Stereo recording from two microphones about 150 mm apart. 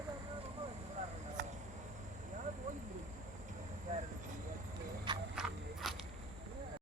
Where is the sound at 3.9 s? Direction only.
55° right (ahead or behind).